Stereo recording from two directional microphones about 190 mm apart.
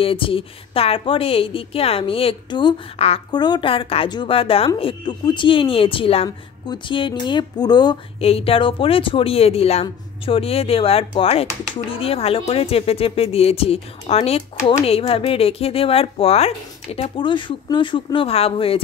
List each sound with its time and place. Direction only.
0.0 s a woman's voice: 30° left (ahead or behind)